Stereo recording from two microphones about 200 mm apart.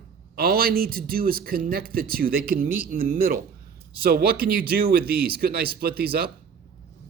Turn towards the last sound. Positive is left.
turn(degrees=-50)  # may be behind; listen again after turning